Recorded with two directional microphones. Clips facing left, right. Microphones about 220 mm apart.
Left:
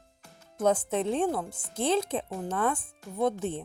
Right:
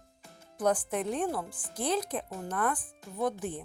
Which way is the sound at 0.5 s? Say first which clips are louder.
Left 3 dB; 25° left (ahead or behind).